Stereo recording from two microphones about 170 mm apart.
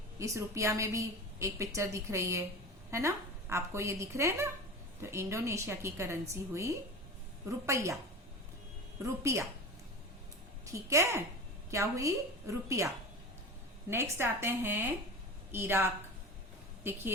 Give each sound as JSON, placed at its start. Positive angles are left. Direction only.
{"t": 0.2, "sound": "a woman's voice", "side_deg": -15}
{"t": 9.0, "sound": "a woman's voice", "side_deg": -15}
{"t": 10.7, "sound": "a woman's voice", "side_deg": -20}
{"t": 13.9, "sound": "a woman's voice", "side_deg": -15}